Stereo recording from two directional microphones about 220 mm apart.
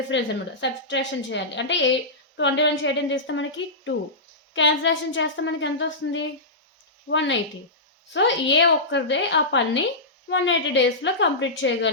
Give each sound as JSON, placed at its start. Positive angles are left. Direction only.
{"t": 0.1, "sound": "a woman's voice", "side_deg": 55}